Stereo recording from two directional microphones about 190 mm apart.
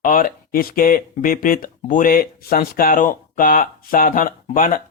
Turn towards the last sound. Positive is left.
turn(degrees=45)  # may be behind; listen again after turning